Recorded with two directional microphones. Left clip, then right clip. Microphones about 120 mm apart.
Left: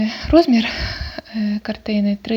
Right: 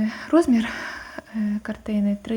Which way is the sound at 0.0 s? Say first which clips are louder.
Left 6 dB; 20° left (ahead or behind).